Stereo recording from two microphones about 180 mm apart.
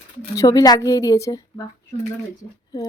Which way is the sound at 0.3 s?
20° left (ahead or behind).